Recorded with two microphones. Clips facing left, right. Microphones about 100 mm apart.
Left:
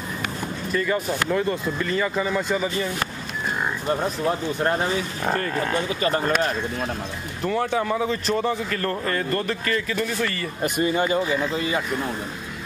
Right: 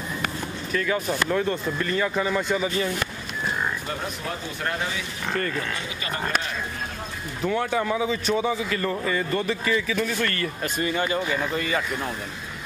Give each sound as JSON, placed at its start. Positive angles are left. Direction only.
{"t": 0.7, "sound": "a man's voice", "side_deg": 0}
{"t": 4.6, "sound": "speech", "side_deg": 35}
{"t": 7.4, "sound": "a man's voice", "side_deg": 0}
{"t": 10.6, "sound": "speech", "side_deg": 20}